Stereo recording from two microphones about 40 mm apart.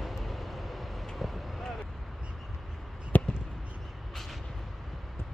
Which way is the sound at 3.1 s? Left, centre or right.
Left.